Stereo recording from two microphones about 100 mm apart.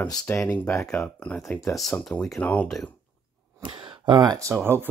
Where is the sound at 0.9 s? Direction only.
10° left (ahead or behind).